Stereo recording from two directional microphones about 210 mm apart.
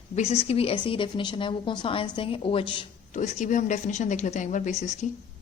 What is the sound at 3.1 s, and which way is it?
Speech, 35° left (ahead or behind).